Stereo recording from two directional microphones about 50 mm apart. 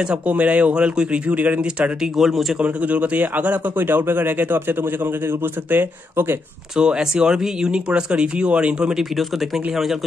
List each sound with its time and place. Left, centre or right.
0.3 s speech: right
2.1 s a man's voice: centre
2.6 s speech: right
3.7 s speech: right
6.8 s speech: centre